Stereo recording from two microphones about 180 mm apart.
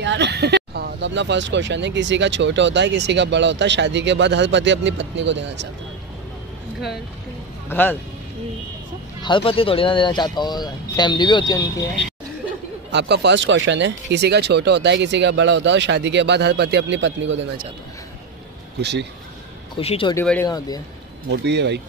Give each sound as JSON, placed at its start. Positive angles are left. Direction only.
{"t": 0.0, "sound": "speech", "side_deg": -75}
{"t": 7.7, "sound": "speech", "side_deg": 10}
{"t": 9.2, "sound": "speech", "side_deg": 30}
{"t": 12.9, "sound": "speech", "side_deg": -70}
{"t": 18.8, "sound": "speech", "side_deg": -70}
{"t": 19.8, "sound": "speech", "side_deg": 30}
{"t": 20.4, "sound": "speech", "side_deg": 20}
{"t": 21.3, "sound": "speech", "side_deg": -70}